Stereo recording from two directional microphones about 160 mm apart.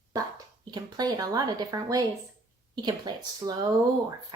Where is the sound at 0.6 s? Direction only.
25° right (ahead or behind).